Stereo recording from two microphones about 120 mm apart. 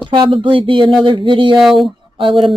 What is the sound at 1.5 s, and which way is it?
Speech, centre (ahead or behind).